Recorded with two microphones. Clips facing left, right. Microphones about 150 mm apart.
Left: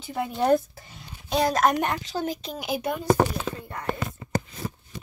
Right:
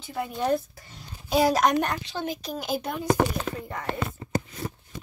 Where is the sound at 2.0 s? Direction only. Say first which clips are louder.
Left 2 dB; 40° left (ahead or behind).